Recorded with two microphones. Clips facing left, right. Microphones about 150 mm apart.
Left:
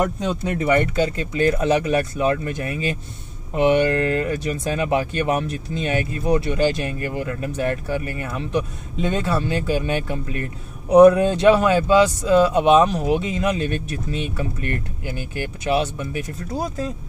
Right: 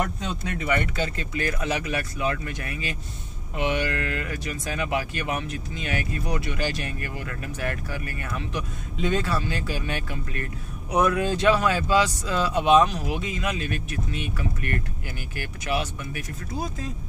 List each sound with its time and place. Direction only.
0.0 s speech: 35° left (ahead or behind)